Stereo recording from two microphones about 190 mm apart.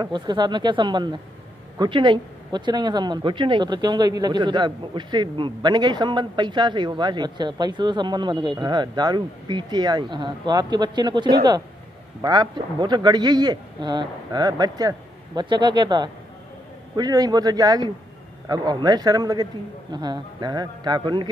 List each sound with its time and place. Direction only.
0.0 s speech: 20° right (ahead or behind)